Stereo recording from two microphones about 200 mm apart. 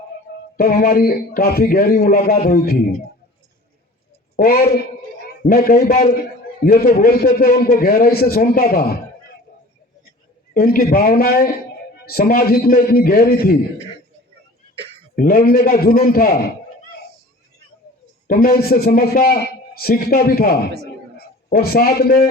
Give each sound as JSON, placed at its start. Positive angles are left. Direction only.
{"t": 0.5, "sound": "a man's voice", "side_deg": 45}
{"t": 4.4, "sound": "a man's voice", "side_deg": 45}
{"t": 10.5, "sound": "a man's voice", "side_deg": 45}
{"t": 15.1, "sound": "a man's voice", "side_deg": 45}
{"t": 18.3, "sound": "a man's voice", "side_deg": 45}